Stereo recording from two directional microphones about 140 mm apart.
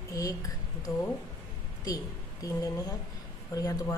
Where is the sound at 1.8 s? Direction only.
25° left (ahead or behind).